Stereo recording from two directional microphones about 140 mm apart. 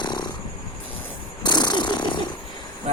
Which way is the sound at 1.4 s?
30° left (ahead or behind).